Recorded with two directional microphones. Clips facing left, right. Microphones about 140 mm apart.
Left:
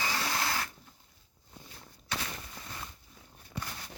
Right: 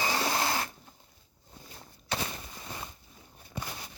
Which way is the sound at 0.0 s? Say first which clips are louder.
Right 4 dB; 25° right (ahead or behind).